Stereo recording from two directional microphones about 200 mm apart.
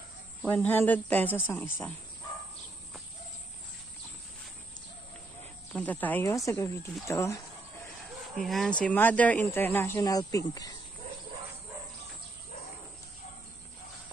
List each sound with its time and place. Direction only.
0.4 s speech: 10° left (ahead or behind)
5.7 s speech: 5° left (ahead or behind)
8.4 s speech: centre (ahead or behind); by 10.8 s 15° left (ahead or behind)